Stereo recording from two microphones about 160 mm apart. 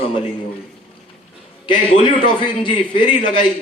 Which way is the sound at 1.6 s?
30° left (ahead or behind).